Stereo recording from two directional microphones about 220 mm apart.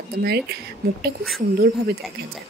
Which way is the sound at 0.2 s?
45° right (ahead or behind).